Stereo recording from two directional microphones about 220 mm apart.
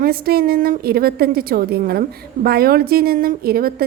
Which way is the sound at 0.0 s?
45° right (ahead or behind).